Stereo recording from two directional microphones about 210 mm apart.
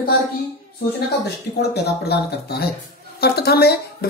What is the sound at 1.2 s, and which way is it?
Speech, 50° left (ahead or behind).